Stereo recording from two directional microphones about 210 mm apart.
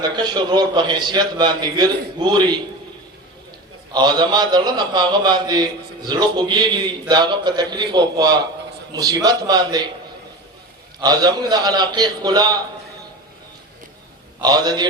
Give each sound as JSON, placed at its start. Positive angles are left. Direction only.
{"t": 0.0, "sound": "a man's voice", "side_deg": -20}
{"t": 3.9, "sound": "a man's voice", "side_deg": -20}
{"t": 11.0, "sound": "a man's voice", "side_deg": -20}
{"t": 14.4, "sound": "a man's voice", "side_deg": -20}